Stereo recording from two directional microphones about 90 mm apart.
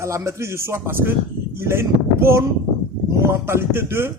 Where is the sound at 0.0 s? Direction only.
30° right (ahead or behind).